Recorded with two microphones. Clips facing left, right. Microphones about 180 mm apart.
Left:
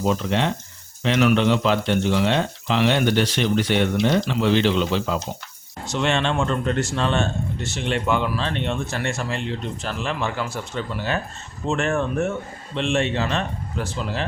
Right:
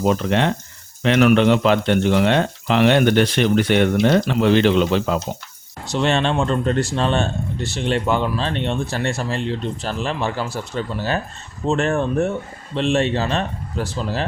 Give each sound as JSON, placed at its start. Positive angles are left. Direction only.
{"t": 0.0, "sound": "speech", "side_deg": -60}
{"t": 5.9, "sound": "speech", "side_deg": -35}
{"t": 11.6, "sound": "speech", "side_deg": -35}